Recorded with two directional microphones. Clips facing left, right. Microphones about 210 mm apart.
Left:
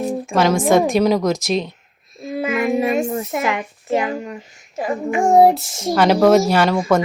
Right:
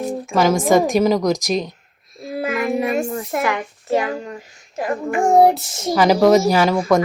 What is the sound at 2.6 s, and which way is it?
A child's voice, 20° left (ahead or behind).